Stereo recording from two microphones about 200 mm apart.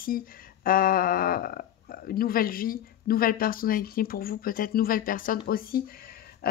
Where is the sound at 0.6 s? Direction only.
45° left (ahead or behind).